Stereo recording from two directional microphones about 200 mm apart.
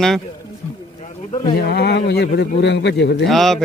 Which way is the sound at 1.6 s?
55° left (ahead or behind).